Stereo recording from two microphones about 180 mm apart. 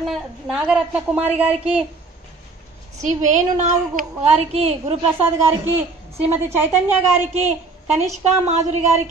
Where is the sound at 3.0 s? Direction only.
45° right (ahead or behind).